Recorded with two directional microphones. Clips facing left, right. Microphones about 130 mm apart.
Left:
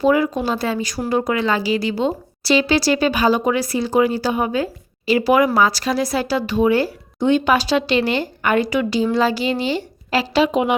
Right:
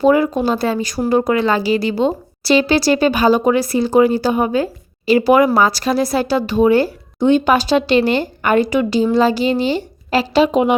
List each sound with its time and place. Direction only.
0.0 s a woman's voice: 50° right (ahead or behind)